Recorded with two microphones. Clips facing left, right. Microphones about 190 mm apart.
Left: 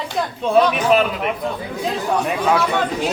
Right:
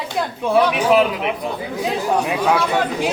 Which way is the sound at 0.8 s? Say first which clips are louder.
Right 1 dB; 15° right (ahead or behind).